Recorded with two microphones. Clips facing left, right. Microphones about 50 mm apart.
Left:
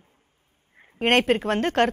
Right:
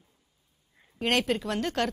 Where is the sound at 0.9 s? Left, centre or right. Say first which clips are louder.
Left 6 dB; left.